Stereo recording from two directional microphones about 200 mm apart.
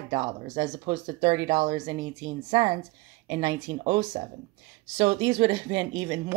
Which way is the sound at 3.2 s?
20° right (ahead or behind).